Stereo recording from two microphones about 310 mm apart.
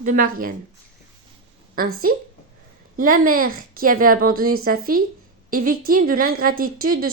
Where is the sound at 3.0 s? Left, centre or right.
Right.